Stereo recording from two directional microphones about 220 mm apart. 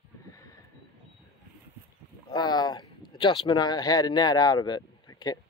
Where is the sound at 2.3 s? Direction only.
20° left (ahead or behind).